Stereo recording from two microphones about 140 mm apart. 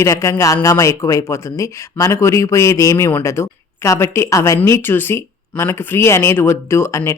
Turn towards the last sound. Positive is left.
turn(degrees=20)  # may be behind; listen again after turning